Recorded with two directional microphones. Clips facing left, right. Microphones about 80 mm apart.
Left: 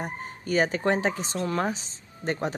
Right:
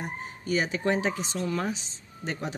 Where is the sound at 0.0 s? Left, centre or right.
Left.